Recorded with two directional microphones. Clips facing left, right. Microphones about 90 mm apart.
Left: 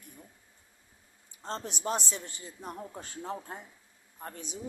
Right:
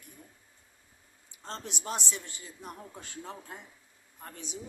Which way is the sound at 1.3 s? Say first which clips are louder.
Left 3 dB; 35° left (ahead or behind).